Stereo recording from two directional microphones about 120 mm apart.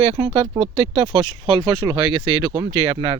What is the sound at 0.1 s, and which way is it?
Speech, 50° right (ahead or behind).